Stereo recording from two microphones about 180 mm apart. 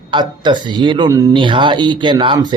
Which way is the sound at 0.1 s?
25° right (ahead or behind).